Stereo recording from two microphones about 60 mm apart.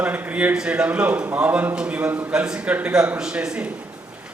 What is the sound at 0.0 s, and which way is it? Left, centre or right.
Speech, right.